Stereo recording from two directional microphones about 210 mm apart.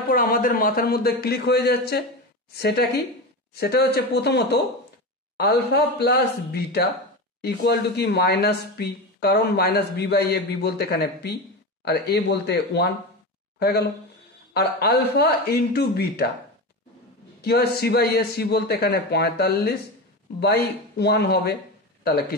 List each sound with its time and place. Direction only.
0.1 s speech: 40° left (ahead or behind)
17.4 s speech: 50° left (ahead or behind)